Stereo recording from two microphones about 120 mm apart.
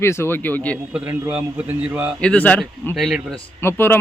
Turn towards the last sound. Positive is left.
turn(degrees=20)  # may be behind; listen again after turning